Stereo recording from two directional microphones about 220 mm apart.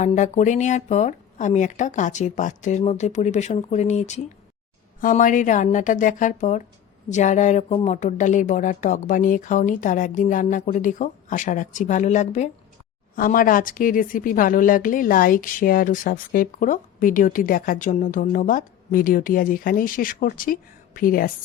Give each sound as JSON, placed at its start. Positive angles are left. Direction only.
{"t": 0.0, "sound": "a woman's voice", "side_deg": 35}